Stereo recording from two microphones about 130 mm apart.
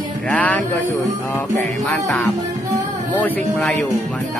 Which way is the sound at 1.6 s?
15° left (ahead or behind).